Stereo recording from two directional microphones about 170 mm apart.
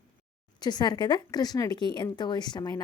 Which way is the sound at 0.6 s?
25° left (ahead or behind).